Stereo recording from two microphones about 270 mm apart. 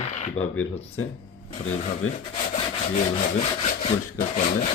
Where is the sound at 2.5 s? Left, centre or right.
Left.